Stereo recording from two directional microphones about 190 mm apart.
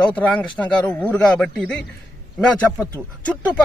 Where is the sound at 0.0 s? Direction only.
5° left (ahead or behind).